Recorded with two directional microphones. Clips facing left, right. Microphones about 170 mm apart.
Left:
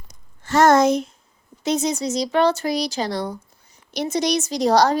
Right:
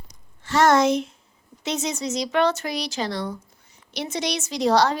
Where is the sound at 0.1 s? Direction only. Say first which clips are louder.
Left 3 dB; 45° left (ahead or behind).